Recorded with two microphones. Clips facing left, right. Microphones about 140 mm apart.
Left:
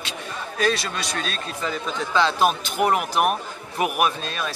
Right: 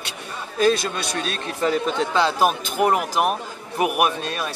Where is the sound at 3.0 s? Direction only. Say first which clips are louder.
Even; 5° left (ahead or behind).